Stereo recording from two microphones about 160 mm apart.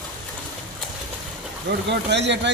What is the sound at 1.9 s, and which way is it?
Speech, 90° right.